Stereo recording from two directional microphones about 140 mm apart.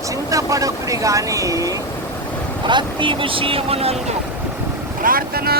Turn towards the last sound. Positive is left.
turn(degrees=-90)